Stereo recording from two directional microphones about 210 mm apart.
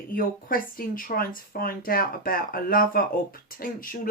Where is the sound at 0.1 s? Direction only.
40° left (ahead or behind).